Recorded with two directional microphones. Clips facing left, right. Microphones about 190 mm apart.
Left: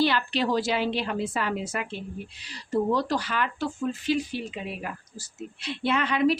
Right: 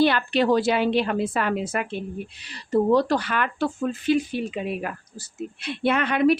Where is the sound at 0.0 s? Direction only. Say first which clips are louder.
Right 5 dB; 55° right (ahead or behind).